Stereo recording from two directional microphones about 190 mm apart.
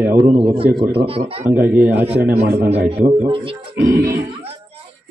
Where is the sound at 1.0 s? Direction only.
30° right (ahead or behind).